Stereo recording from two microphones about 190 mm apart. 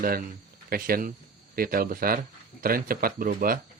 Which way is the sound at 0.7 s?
50° right (ahead or behind).